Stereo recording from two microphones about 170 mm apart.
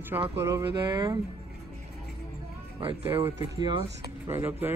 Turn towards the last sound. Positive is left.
turn(degrees=-15)  # may be behind; listen again after turning